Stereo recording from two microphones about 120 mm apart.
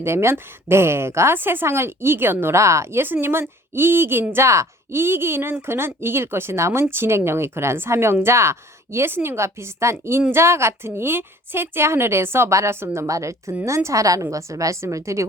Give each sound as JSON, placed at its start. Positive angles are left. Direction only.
{"t": 0.0, "sound": "speech", "side_deg": -20}